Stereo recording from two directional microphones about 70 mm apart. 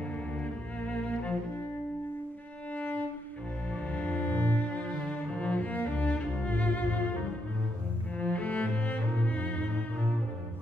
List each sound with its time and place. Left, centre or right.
0.4 s cello: centre
2.7 s violin: left
3.9 s cello: centre
8.2 s cello: centre